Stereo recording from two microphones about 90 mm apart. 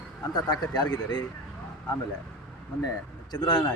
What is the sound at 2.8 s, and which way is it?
Speech, 50° left (ahead or behind).